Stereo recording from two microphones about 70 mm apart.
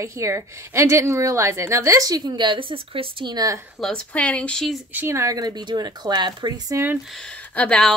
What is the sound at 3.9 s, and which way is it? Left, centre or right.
Speech, centre.